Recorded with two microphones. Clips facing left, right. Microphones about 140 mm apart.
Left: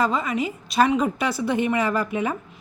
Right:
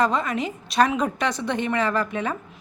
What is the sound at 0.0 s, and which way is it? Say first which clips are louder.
A woman's voice: even; 5° left (ahead or behind).